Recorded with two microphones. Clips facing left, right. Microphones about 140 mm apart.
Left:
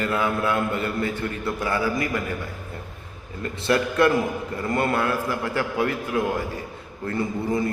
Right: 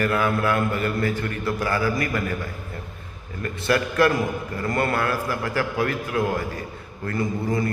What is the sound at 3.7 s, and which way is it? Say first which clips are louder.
A man's voice: even; 20° left (ahead or behind).